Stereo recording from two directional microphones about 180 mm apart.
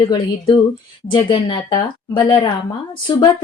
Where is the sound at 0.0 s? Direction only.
25° left (ahead or behind).